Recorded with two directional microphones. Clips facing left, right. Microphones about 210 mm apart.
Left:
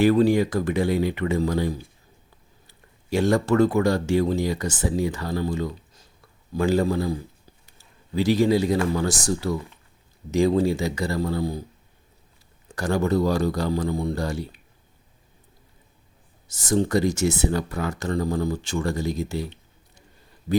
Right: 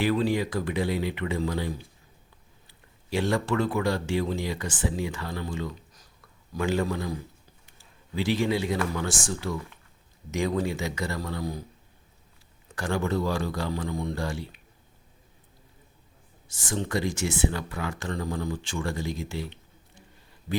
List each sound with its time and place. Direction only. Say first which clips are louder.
0.0 s speech: left 7 dB; 45° left (ahead or behind)
3.1 s speech: left 6 dB; 45° left (ahead or behind)
12.7 s speech: left 5 dB; 40° left (ahead or behind)
16.5 s speech: left 8 dB; 40° left (ahead or behind)